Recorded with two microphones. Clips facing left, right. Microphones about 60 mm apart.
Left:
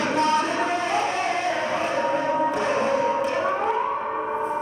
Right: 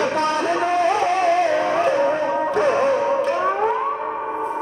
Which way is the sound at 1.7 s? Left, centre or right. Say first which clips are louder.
Right 5 dB; right.